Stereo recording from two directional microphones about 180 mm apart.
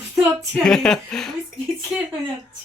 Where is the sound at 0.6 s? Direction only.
5° left (ahead or behind).